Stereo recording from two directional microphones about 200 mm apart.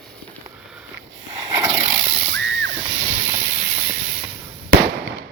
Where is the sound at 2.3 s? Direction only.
70° right (ahead or behind).